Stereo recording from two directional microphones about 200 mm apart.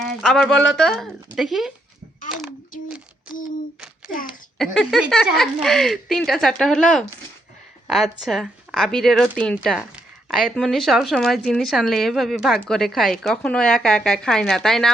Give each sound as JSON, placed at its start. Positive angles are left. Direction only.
{"t": 0.2, "sound": "speech", "side_deg": 0}
{"t": 2.7, "sound": "a sound", "side_deg": 40}
{"t": 4.3, "sound": "speech", "side_deg": 0}